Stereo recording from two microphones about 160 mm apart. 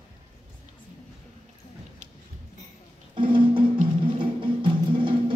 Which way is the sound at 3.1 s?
30° right (ahead or behind).